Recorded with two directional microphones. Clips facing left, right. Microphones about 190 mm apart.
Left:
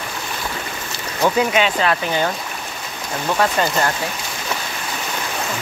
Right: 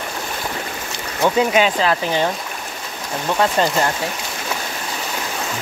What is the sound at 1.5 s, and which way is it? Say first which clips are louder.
Speech: right 2 dB; 40° right (ahead or behind).